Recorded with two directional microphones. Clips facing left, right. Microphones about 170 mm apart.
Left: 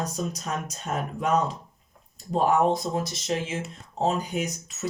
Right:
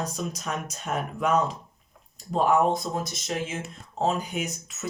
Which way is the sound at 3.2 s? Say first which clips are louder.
Left 2 dB; 30° left (ahead or behind).